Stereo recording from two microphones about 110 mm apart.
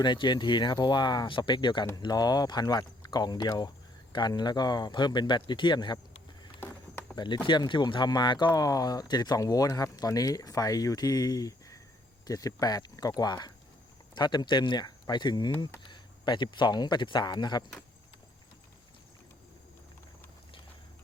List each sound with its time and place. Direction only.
0.0 s speech: 45° left (ahead or behind)
6.6 s a sound: 20° left (ahead or behind)
7.4 s speech: 45° left (ahead or behind)